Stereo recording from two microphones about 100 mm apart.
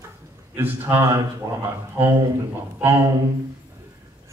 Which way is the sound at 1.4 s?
35° right (ahead or behind).